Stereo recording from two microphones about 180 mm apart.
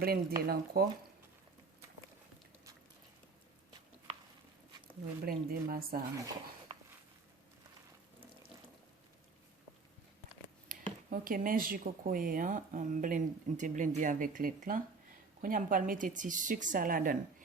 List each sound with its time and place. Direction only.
0.0 s speech: 55° right (ahead or behind)
5.2 s speech: 55° right (ahead or behind)
6.7 s a sound: 30° right (ahead or behind)
10.7 s speech: 50° right (ahead or behind)